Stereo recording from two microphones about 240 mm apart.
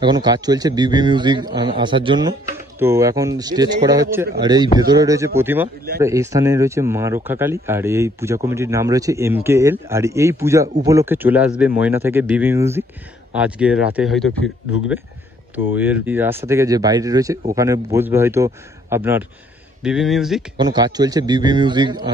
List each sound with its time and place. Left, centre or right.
0.0 s a man's voice: centre
15.5 s a man's voice: centre
20.5 s a man's voice: centre